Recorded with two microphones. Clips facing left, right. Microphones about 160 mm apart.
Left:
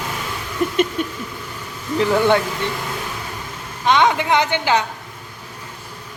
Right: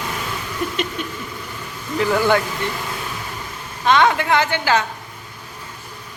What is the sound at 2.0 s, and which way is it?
Speech, 25° left (ahead or behind).